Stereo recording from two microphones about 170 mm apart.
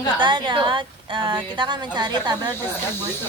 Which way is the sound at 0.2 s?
25° right (ahead or behind).